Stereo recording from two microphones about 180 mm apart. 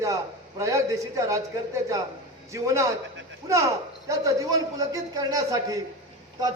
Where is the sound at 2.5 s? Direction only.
15° right (ahead or behind).